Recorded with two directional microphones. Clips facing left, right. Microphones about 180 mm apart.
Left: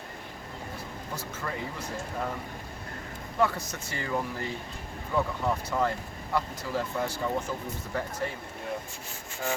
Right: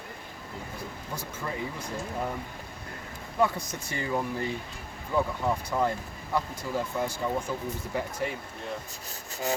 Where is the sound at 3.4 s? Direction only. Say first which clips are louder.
Right 1 dB; 15° right (ahead or behind).